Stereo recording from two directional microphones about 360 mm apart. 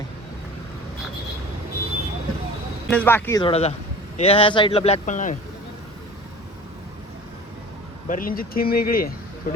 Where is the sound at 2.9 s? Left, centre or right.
Centre; by 5.3 s left.